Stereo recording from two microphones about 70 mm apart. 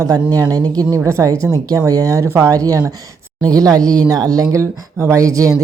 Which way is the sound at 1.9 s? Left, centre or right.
Right.